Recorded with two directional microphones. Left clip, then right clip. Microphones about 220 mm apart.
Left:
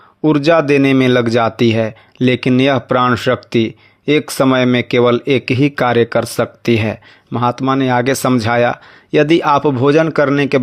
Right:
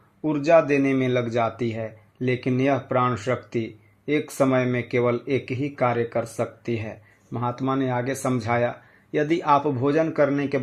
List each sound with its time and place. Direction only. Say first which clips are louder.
0.2 s speech: left 7 dB; 45° left (ahead or behind)